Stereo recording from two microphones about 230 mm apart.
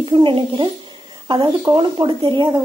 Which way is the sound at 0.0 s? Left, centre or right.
Right.